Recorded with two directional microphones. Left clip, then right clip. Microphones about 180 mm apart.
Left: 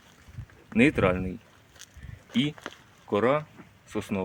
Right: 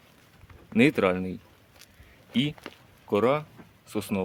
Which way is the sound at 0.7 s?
20° right (ahead or behind).